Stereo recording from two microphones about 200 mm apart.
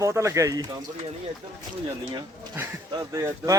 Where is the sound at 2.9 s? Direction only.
15° right (ahead or behind).